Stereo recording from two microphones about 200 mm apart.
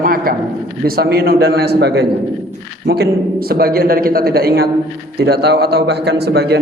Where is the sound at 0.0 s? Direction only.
45° right (ahead or behind).